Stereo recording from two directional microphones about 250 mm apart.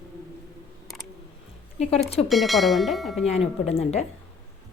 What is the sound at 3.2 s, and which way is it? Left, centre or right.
Speech, left.